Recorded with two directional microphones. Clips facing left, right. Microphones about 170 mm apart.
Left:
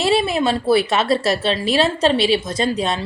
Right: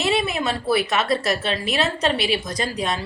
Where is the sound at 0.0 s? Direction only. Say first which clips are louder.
Left 5 dB; 30° left (ahead or behind).